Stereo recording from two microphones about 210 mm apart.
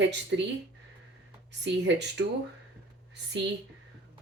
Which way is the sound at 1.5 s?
55° right (ahead or behind).